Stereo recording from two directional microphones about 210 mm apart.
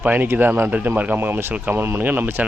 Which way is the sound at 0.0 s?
10° right (ahead or behind).